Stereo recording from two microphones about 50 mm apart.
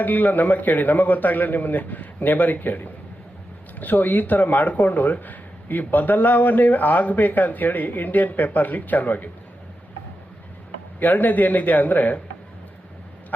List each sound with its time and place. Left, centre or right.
0.0 s speech: left
11.0 s speech: left